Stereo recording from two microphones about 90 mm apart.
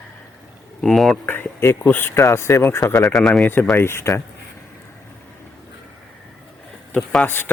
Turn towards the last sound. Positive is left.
turn(degrees=20)  # may be behind; listen again after turning